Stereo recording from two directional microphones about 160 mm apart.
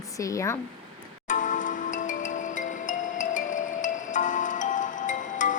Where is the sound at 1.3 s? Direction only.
55° left (ahead or behind).